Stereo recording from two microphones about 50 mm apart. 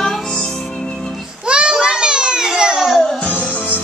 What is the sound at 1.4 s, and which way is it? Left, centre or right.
Children playing, centre.